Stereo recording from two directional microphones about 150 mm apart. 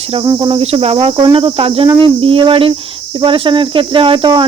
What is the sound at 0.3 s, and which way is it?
Cricket, 30° right (ahead or behind).